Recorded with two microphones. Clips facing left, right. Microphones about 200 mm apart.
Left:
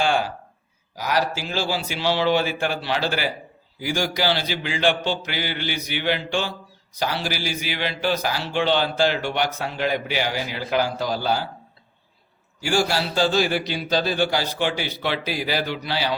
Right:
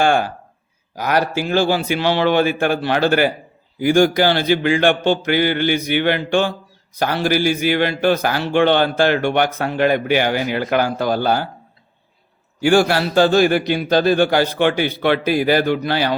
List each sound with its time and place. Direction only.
0.0 s a man's voice: 55° right (ahead or behind)
12.6 s a man's voice: 60° right (ahead or behind)